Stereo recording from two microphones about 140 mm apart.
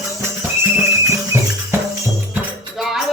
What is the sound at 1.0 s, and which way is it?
Music, 20° right (ahead or behind).